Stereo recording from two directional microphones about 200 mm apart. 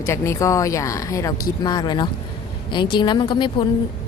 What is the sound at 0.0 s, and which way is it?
Speech, 15° left (ahead or behind).